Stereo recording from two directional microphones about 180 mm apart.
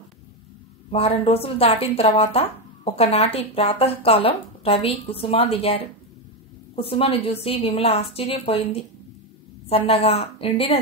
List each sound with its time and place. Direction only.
0.9 s a woman's voice: 35° left (ahead or behind)